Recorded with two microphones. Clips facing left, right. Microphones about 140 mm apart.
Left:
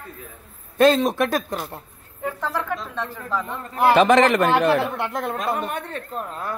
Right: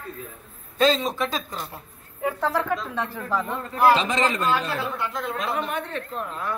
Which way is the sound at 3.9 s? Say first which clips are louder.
Left 8 dB; 65° left (ahead or behind).